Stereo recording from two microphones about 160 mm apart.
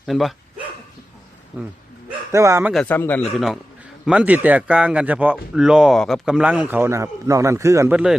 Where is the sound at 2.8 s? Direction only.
10° left (ahead or behind).